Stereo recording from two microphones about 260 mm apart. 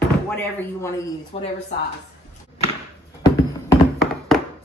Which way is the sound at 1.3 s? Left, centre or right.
Left.